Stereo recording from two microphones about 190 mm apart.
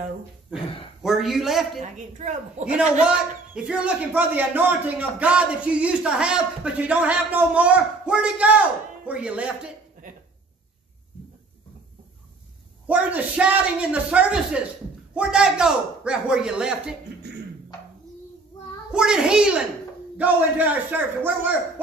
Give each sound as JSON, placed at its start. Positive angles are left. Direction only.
{"t": 1.0, "sound": "a man's voice", "side_deg": 0}
{"t": 1.8, "sound": "a woman's voice", "side_deg": -40}
{"t": 2.6, "sound": "a man's voice", "side_deg": -5}
{"t": 12.8, "sound": "a man's voice", "side_deg": -10}
{"t": 18.9, "sound": "a man's voice", "side_deg": -5}